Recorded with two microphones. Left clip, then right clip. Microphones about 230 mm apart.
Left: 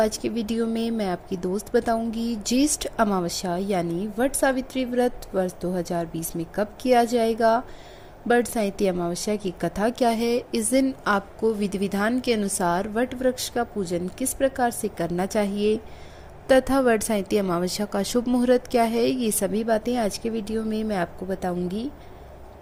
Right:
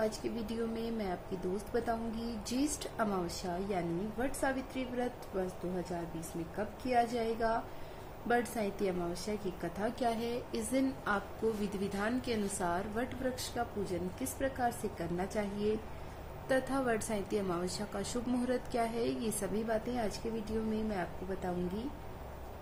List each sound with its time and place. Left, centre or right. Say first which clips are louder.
0.0 s a woman's voice: left 12 dB; left